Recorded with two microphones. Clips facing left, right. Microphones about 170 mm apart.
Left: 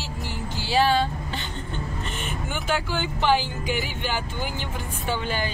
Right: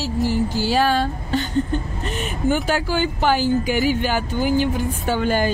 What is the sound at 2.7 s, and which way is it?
Speech, 40° right (ahead or behind).